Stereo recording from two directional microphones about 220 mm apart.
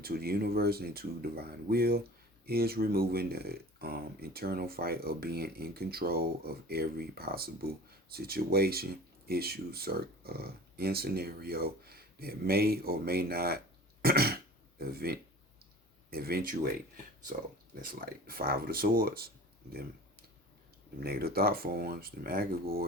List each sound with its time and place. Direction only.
0.0 s speech: 45° right (ahead or behind)
14.0 s throat clearing: 45° right (ahead or behind)
14.8 s speech: 45° right (ahead or behind)
21.0 s speech: 45° right (ahead or behind)